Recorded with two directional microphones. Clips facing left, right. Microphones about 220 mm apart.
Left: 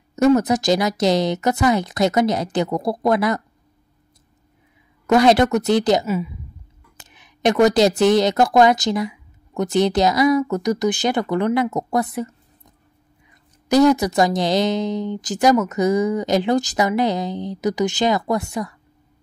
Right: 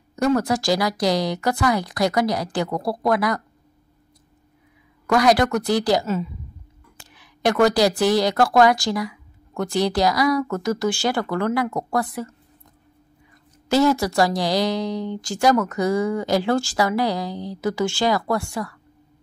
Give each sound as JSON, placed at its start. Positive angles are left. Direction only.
{"t": 0.1, "sound": "a woman's voice", "side_deg": 20}
{"t": 5.0, "sound": "a woman's voice", "side_deg": 25}
{"t": 6.0, "sound": "a woman's voice", "side_deg": 10}
{"t": 13.7, "sound": "a woman's voice", "side_deg": 20}